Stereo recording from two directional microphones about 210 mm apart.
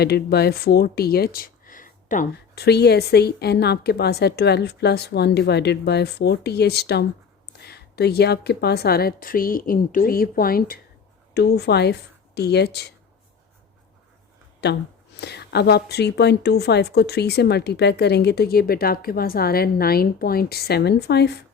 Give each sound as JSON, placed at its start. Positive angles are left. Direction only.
{"t": 0.0, "sound": "speech", "side_deg": 50}
{"t": 2.6, "sound": "a woman's voice", "side_deg": 50}
{"t": 14.6, "sound": "a woman's voice", "side_deg": 50}